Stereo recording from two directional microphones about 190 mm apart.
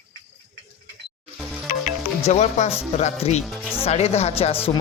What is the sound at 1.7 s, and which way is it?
Music, 45° left (ahead or behind).